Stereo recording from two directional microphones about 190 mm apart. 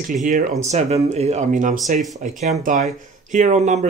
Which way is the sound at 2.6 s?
40° right (ahead or behind).